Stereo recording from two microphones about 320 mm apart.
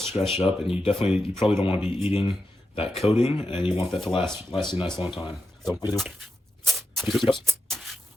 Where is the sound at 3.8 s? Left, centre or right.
Centre.